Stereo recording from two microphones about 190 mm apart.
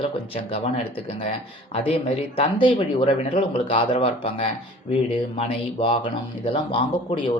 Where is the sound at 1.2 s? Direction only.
30° left (ahead or behind).